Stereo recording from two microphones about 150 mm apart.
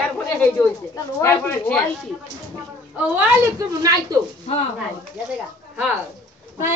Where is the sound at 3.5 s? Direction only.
25° right (ahead or behind).